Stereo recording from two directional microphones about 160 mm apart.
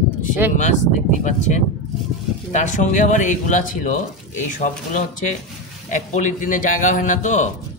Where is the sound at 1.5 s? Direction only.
50° left (ahead or behind).